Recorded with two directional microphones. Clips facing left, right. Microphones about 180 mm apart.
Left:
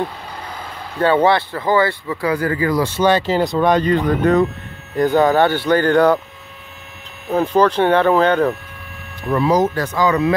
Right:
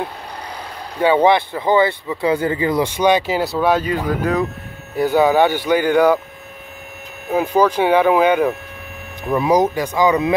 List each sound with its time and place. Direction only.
0.9 s speech: 10° right (ahead or behind)
7.2 s speech: 10° right (ahead or behind)